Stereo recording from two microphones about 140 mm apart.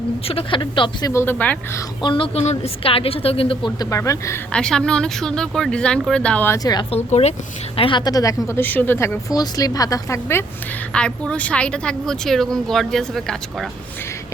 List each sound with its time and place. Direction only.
0.3 s speech: 40° left (ahead or behind)
1.1 s speech: 15° left (ahead or behind)
2.0 s speech: 35° left (ahead or behind)
3.8 s a woman's voice: 25° left (ahead or behind)
4.5 s speech: 5° left (ahead or behind)
6.6 s a woman's voice: 30° left (ahead or behind)
6.9 s speech: 50° left (ahead or behind)
7.8 s a woman's voice: 35° left (ahead or behind); by 10.4 s 20° left (ahead or behind)
10.9 s speech: 5° left (ahead or behind)